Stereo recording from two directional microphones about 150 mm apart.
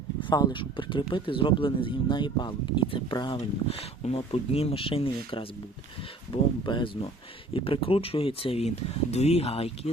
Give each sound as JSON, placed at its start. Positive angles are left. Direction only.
{"t": 0.2, "sound": "speech", "side_deg": 30}
{"t": 3.7, "sound": "speech", "side_deg": 40}